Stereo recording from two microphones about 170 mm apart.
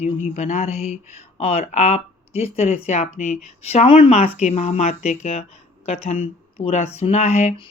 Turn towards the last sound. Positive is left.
turn(degrees=40)  # may be behind; listen again after turning